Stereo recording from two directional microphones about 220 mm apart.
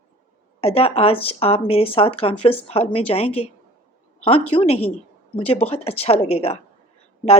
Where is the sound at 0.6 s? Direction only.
25° left (ahead or behind).